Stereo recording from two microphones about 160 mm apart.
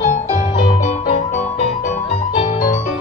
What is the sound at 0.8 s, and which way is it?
Music, 50° left (ahead or behind).